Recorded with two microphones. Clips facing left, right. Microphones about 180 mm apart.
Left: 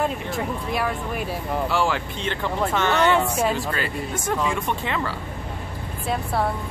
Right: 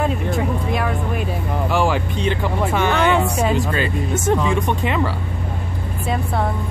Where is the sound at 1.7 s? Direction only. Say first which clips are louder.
Right 7 dB; 15° right (ahead or behind).